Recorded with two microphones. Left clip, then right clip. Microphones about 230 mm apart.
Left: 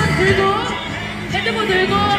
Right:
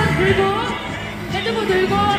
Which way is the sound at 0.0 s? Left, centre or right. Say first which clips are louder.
Left 1 dB; centre.